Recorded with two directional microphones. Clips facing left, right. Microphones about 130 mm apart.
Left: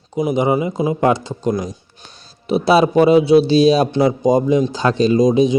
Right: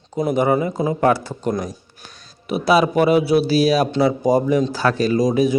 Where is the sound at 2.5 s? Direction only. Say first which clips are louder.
Left 3 dB; 30° left (ahead or behind).